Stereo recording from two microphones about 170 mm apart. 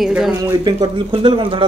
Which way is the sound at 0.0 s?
Centre (ahead or behind).